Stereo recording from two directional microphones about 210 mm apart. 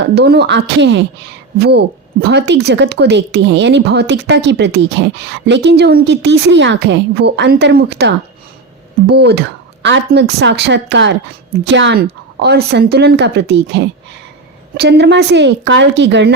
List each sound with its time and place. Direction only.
0.0 s a woman's voice: 50° right (ahead or behind)
9.1 s a woman's voice: 50° right (ahead or behind)